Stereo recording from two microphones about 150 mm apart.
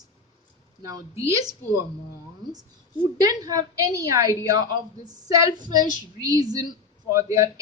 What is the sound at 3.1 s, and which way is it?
Speech, 25° right (ahead or behind).